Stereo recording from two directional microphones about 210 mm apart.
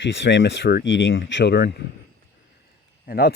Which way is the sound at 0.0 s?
60° left (ahead or behind).